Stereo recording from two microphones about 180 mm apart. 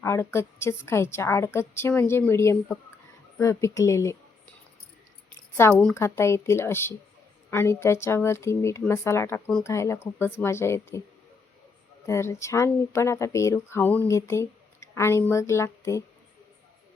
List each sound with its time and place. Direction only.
0.0 s speech: 15° left (ahead or behind)
5.5 s speech: 10° left (ahead or behind)
12.0 s speech: 15° left (ahead or behind)